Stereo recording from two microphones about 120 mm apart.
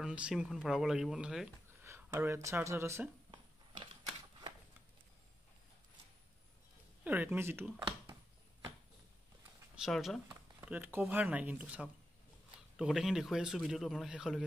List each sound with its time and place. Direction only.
0.0 s a man's voice: 5° right (ahead or behind)
1.8 s speech: 20° right (ahead or behind)
7.1 s speech: 15° right (ahead or behind)
9.8 s a man's voice: centre (ahead or behind)
10.6 s a man's voice: 15° right (ahead or behind)